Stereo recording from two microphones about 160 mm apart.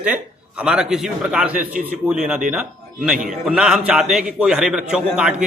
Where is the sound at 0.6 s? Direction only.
5° right (ahead or behind).